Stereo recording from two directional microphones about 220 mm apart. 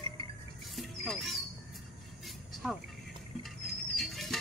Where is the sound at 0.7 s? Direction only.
Centre (ahead or behind).